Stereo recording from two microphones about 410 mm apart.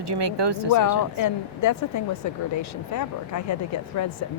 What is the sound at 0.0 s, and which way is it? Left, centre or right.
Speech, right.